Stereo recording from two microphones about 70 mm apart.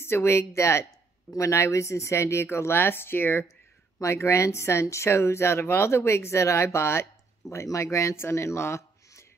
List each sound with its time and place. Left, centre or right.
0.0 s speech: left
4.0 s speech: left